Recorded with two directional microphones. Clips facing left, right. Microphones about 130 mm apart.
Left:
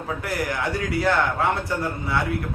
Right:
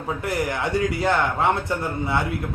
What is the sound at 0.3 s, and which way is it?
Speech, 25° right (ahead or behind).